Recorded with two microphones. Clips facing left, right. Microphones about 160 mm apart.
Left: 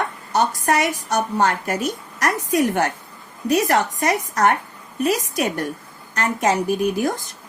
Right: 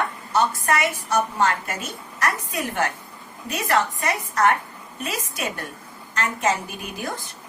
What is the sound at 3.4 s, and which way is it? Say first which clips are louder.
A woman's voice: left 5 dB; 40° left (ahead or behind).